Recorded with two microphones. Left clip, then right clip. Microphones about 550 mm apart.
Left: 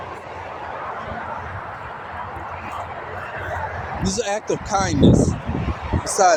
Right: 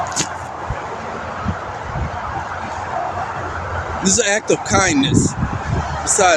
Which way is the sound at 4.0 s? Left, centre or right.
Left.